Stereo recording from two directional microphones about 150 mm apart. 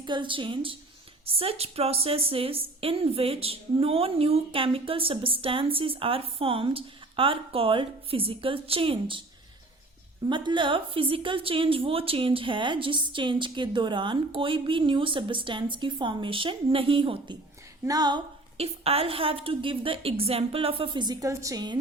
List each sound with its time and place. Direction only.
0.0 s a woman's voice: 30° right (ahead or behind)
10.2 s a woman's voice: 30° right (ahead or behind)
18.5 s a woman's voice: 40° right (ahead or behind); by 21.8 s 25° right (ahead or behind)